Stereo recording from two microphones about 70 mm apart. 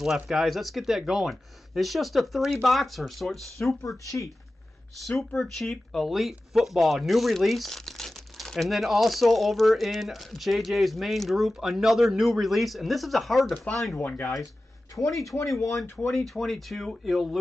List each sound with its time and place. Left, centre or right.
0.0 s speech: centre
4.0 s speech: left
5.0 s speech: centre
14.0 s speech: left
15.2 s speech: left
16.1 s speech: centre